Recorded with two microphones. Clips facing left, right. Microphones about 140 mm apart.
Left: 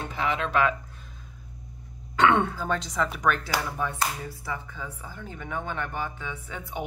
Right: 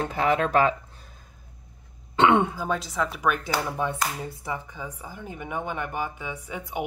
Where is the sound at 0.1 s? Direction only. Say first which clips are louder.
Right 4 dB; 45° right (ahead or behind).